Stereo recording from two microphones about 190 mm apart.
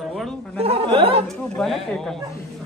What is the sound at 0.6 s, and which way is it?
Speech, 30° right (ahead or behind).